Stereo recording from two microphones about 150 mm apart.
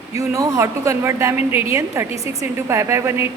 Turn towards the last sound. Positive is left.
turn(degrees=-15)  # may be behind; listen again after turning